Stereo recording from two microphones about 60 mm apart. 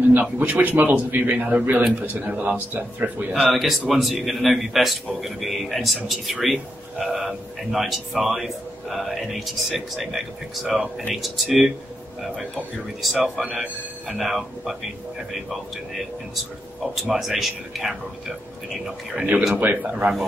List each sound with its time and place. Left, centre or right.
0.1 s a man's voice: right
3.3 s a man's voice: centre
13.0 s a man's voice: centre
16.9 s a man's voice: centre
19.5 s a man's voice: right